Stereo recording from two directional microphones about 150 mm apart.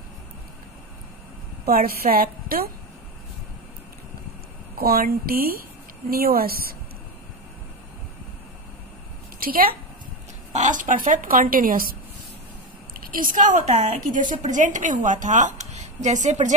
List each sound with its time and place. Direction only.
1.7 s a woman's voice: 75° right (ahead or behind)
4.7 s speech: 80° right
9.4 s a woman's voice: 75° right (ahead or behind)
10.5 s speech: 55° right (ahead or behind); by 12.0 s 70° right (ahead or behind)
13.0 s speech: 65° right (ahead or behind); by 16.5 s 50° right (ahead or behind)